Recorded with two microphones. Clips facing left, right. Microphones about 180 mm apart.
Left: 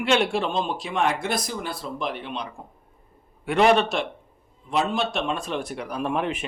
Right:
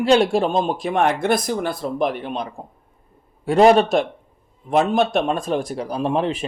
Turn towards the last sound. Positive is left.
turn(degrees=-30)  # may be behind; listen again after turning